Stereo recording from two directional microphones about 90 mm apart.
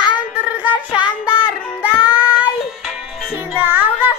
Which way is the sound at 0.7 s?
60° left (ahead or behind).